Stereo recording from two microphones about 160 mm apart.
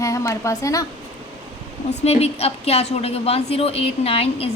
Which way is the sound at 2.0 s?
40° left (ahead or behind).